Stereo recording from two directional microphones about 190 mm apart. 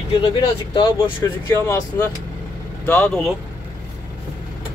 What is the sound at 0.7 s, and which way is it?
Speech, 20° left (ahead or behind).